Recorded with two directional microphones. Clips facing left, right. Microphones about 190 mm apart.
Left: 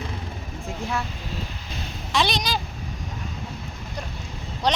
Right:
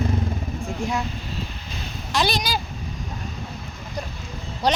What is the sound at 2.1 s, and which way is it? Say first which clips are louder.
Speech: right 1 dB; centre (ahead or behind).